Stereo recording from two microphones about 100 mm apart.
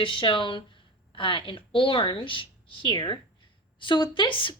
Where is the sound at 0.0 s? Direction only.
60° left (ahead or behind).